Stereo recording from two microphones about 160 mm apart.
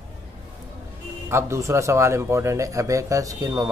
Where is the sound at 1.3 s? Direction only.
15° right (ahead or behind).